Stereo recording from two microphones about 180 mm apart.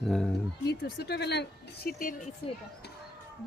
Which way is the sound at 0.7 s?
65° left (ahead or behind).